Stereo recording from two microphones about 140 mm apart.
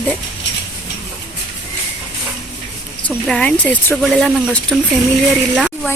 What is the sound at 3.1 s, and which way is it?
Speech, 5° left (ahead or behind).